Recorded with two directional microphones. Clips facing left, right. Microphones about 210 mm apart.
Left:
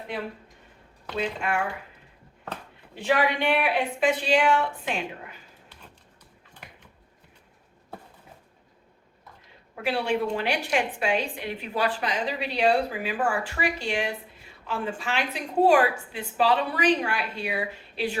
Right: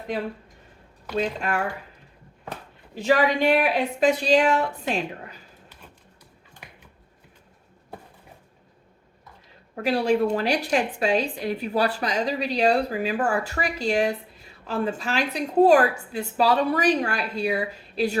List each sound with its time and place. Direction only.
1.1 s a woman's voice: 40° right (ahead or behind)
2.9 s a woman's voice: 40° right (ahead or behind)
9.8 s a woman's voice: 40° right (ahead or behind)